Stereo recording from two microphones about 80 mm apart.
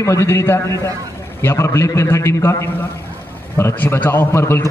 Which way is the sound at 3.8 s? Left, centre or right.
Left.